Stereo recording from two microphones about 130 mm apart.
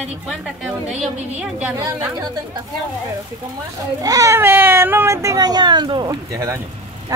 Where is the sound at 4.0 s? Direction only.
25° right (ahead or behind).